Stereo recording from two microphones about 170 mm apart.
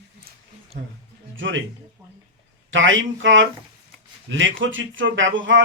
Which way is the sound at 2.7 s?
90° right.